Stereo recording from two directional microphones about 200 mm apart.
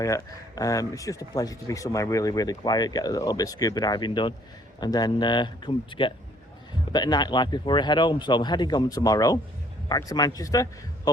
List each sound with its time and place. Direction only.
0.0 s speech: 15° left (ahead or behind)